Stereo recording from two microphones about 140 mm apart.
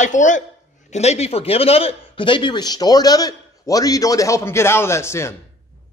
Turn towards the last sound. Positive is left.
turn(degrees=20)  # may be behind; listen again after turning